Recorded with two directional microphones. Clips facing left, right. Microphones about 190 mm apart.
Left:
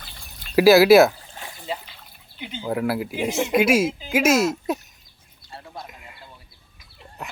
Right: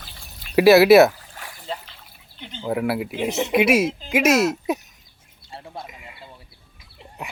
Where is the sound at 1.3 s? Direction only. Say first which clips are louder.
Left 1 dB; 25° left (ahead or behind).